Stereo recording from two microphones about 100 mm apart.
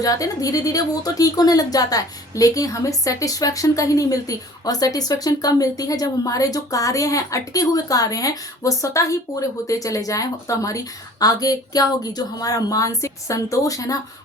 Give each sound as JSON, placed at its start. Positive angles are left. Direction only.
{"t": 0.0, "sound": "a woman's voice", "side_deg": 35}